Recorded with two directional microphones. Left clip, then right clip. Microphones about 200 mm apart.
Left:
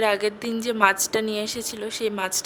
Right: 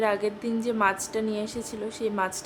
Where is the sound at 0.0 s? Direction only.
45° left (ahead or behind).